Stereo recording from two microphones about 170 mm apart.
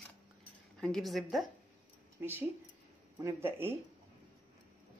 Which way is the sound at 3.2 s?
15° right (ahead or behind).